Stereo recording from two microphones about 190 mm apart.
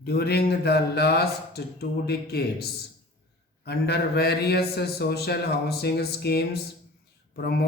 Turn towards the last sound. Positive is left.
turn(degrees=55)  # may be behind; listen again after turning